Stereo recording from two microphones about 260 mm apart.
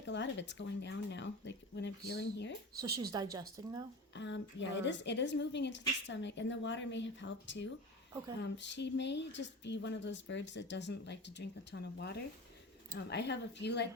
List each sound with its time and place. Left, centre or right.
0.0 s speech: left
2.8 s a woman's voice: centre
4.1 s a woman's voice: left